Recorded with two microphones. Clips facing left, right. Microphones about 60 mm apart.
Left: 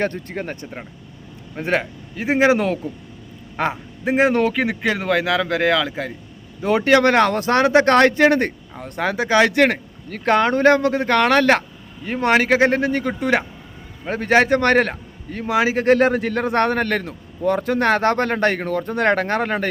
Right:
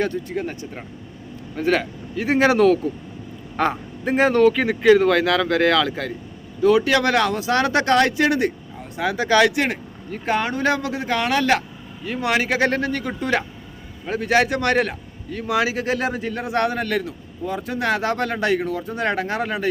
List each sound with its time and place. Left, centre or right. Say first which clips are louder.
0.0 s speech: even; left
1.5 s a man's voice: right 1 dB; left
3.6 s a man's voice: right 1 dB; centre
6.6 s a man's voice: left 1 dB; left
7.5 s a man's voice: left 5 dB; left
7.9 s speech: left 4 dB; left
9.1 s a man's voice: even; left
9.6 s speech: left 6 dB; left
12.0 s a man's voice: left 4 dB; left
12.5 s a man's voice: left 4 dB; left
14.0 s a man's voice: left 2 dB; left
15.8 s speech: left 7 dB; left
17.4 s speech: left 6 dB; left